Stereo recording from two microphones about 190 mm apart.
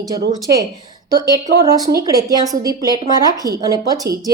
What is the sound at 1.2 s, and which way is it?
Speech, 20° right (ahead or behind).